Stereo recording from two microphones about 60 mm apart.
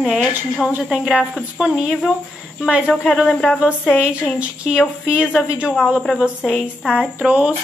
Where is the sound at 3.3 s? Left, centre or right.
Centre.